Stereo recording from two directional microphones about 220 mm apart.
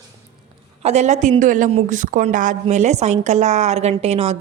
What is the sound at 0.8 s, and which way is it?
Speech, 30° right (ahead or behind).